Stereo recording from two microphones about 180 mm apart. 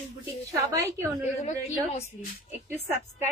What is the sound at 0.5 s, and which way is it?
Speech, 15° right (ahead or behind).